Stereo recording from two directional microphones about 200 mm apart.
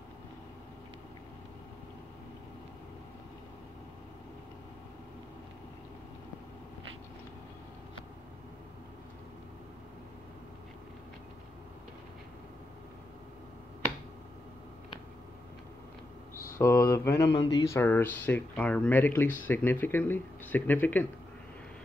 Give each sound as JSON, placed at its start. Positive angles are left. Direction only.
{"t": 16.6, "sound": "speech", "side_deg": 10}
{"t": 17.1, "sound": "a sound", "side_deg": 60}
{"t": 17.5, "sound": "speech", "side_deg": 15}